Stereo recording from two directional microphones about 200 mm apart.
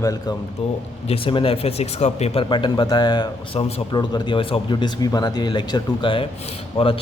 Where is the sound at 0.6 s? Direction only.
30° left (ahead or behind).